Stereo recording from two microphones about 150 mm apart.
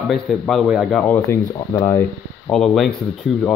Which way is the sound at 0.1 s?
Centre (ahead or behind).